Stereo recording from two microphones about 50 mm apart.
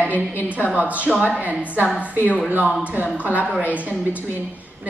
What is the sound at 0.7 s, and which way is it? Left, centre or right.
A woman's voice, right.